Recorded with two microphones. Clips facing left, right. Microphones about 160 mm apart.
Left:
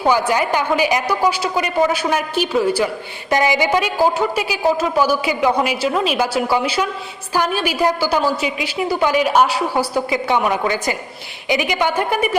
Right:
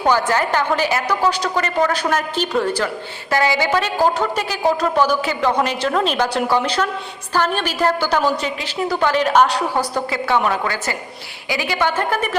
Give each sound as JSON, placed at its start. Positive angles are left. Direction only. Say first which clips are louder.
{"t": 0.0, "sound": "a woman's voice", "louder": "left 1 dB", "side_deg": 10}